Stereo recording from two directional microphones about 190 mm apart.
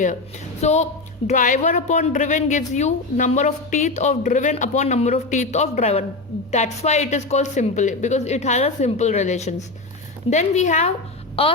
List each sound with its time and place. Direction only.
0.6 s a woman's voice: 35° left (ahead or behind)